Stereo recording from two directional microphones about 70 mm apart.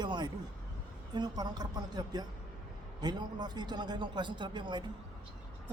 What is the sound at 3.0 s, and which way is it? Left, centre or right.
Speech, right.